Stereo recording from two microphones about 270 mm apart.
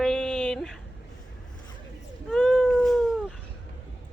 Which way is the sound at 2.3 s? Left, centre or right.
Centre.